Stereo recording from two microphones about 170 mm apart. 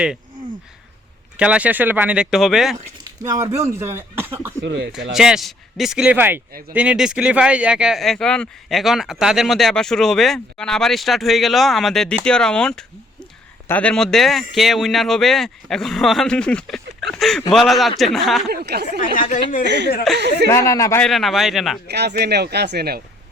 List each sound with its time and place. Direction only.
1.4 s speech: 5° right (ahead or behind)
3.0 s speech: 20° right (ahead or behind)
4.6 s speech: 90° right
5.1 s speech: 5° right (ahead or behind)
18.4 s speech: 70° right (ahead or behind)
19.3 s a woman's voice: 50° left (ahead or behind)
19.6 s speech: 90° right
20.1 s speech: 80° right
20.5 s a man's voice: 20° left (ahead or behind)
21.0 s speech: centre (ahead or behind)
21.8 s speech: 80° right